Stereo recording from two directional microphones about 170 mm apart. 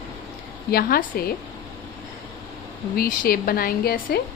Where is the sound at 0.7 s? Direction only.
65° left (ahead or behind).